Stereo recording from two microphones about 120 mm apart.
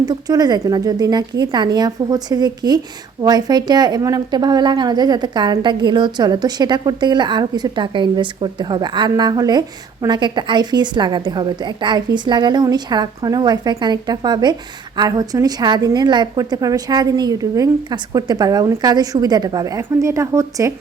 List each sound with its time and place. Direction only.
0.0 s a woman's voice: 30° right (ahead or behind)